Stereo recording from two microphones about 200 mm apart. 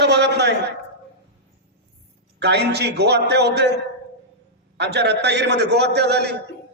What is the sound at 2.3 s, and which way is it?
A man's voice, 55° right (ahead or behind).